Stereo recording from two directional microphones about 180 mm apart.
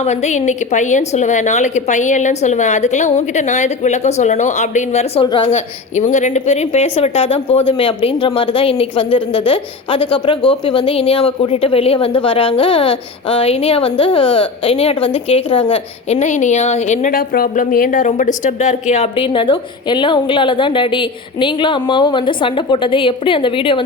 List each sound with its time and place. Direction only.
0.0 s a woman's voice: 40° left (ahead or behind)